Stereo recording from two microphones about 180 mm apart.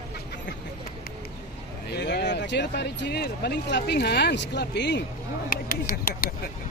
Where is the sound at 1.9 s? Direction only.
65° left (ahead or behind).